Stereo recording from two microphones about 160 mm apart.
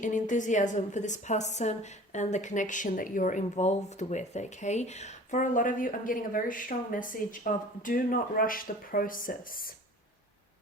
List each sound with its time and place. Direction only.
0.0 s a woman's voice: 50° left (ahead or behind)